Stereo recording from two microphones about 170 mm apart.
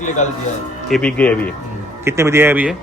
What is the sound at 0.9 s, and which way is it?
Speech, 5° left (ahead or behind).